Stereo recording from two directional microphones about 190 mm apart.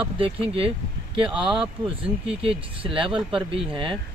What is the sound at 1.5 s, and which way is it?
Speech, 5° right (ahead or behind).